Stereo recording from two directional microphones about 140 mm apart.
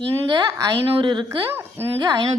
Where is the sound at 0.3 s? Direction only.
30° right (ahead or behind).